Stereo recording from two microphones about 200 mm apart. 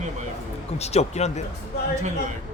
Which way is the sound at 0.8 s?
35° left (ahead or behind).